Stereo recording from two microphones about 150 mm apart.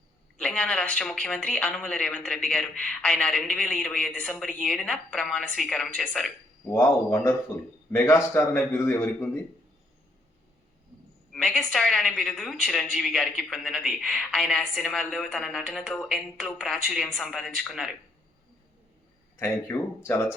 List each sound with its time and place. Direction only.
0.3 s a woman's voice: 5° left (ahead or behind)
6.7 s a woman's voice: 20° left (ahead or behind)
11.3 s a man's voice: 5° left (ahead or behind)
19.4 s a woman's voice: 15° left (ahead or behind)